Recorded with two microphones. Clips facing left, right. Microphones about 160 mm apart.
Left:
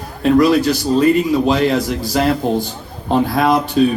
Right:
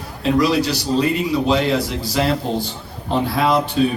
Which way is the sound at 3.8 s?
45° left (ahead or behind).